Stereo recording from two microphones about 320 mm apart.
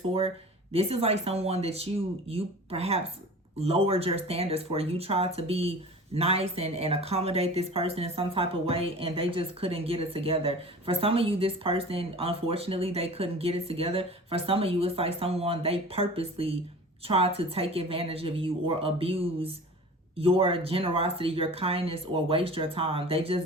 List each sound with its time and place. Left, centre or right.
0.7 s speech: centre